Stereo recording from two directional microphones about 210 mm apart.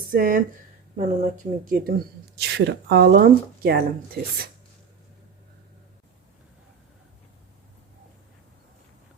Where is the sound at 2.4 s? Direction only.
50° right (ahead or behind).